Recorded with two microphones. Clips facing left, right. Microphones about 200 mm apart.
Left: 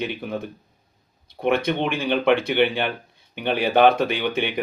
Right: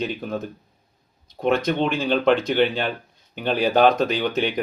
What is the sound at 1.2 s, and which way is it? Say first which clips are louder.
Speech: even; 60° left (ahead or behind).